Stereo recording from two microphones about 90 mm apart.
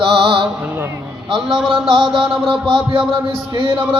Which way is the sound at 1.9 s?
65° right (ahead or behind).